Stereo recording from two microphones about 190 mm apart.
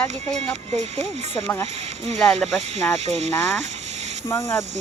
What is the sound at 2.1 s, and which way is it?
Speech, centre (ahead or behind).